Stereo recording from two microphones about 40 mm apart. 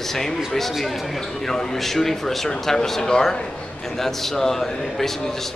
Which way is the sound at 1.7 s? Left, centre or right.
Centre.